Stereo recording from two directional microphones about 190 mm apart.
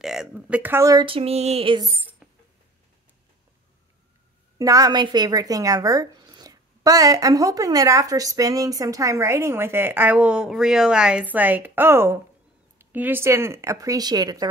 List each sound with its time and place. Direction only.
0.0 s speech: centre (ahead or behind); by 1.9 s 30° right (ahead or behind)
1.9 s speech: 10° right (ahead or behind)
4.6 s speech: 20° right (ahead or behind)